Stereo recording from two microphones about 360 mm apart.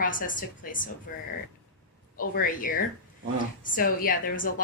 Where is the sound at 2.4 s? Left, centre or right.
Left.